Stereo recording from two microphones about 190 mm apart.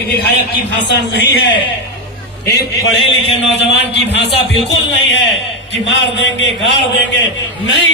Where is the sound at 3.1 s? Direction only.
70° left (ahead or behind).